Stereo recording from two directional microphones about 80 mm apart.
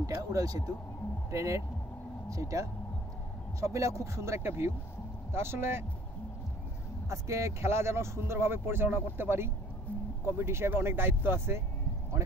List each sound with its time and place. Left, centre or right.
0.0 s speech: right
7.1 s speech: right